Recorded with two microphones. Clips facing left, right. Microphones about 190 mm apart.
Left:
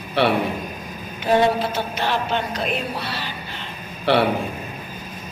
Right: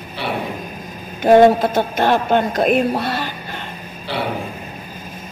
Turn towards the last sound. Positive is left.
turn(degrees=70)  # may be behind; listen again after turning